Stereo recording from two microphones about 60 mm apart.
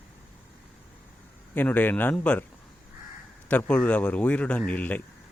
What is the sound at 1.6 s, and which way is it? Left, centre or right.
Speech, left.